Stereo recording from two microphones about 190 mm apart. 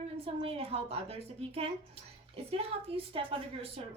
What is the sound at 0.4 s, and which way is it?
A woman's voice, 30° right (ahead or behind).